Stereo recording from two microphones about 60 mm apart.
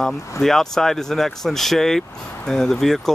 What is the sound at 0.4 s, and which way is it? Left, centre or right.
Speech, centre.